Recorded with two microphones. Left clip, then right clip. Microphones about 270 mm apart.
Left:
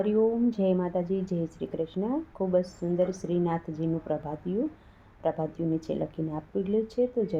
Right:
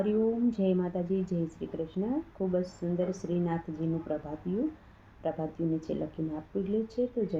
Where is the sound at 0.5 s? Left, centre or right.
Left.